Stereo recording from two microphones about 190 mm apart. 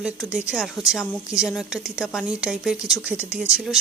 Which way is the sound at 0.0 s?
5° right (ahead or behind).